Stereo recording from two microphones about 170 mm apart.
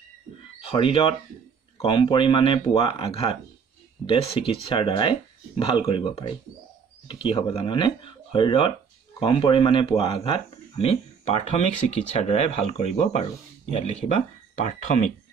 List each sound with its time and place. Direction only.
0.7 s speech: 30° left (ahead or behind)